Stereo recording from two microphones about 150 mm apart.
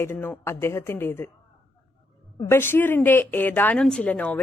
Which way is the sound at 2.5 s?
15° left (ahead or behind).